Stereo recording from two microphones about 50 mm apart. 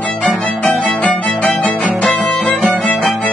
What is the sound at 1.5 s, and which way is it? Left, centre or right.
Music, left.